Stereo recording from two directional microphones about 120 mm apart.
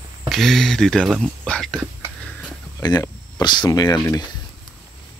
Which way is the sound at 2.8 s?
30° left (ahead or behind).